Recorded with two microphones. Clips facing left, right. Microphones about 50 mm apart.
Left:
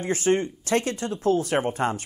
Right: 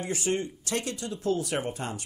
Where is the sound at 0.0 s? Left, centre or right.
Left.